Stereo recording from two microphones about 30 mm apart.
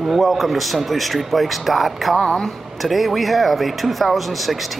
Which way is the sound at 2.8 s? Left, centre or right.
Centre.